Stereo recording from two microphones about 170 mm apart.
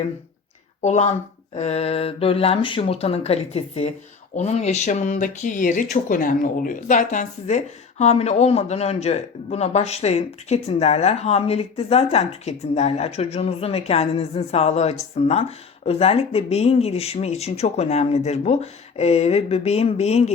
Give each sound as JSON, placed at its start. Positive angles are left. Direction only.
{"t": 0.8, "sound": "speech", "side_deg": 40}